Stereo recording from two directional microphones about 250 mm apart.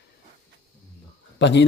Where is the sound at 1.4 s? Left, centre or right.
Left.